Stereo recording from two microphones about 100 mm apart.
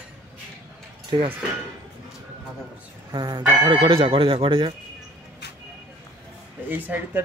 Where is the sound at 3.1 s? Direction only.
40° right (ahead or behind); by 4.7 s 60° right (ahead or behind).